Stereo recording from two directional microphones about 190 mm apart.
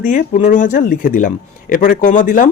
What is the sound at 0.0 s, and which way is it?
Speech, 40° left (ahead or behind).